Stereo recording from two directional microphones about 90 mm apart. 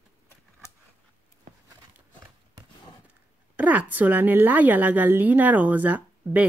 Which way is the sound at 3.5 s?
15° right (ahead or behind).